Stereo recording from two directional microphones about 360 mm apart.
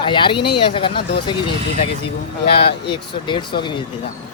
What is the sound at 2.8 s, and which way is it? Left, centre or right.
Speech, centre.